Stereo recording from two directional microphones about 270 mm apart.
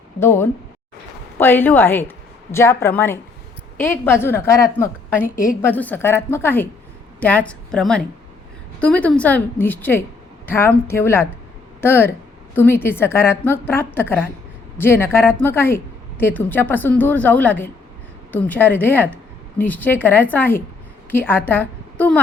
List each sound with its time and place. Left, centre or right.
0.2 s a woman's voice: centre
5.2 s a woman's voice: left
5.6 s a woman's voice: centre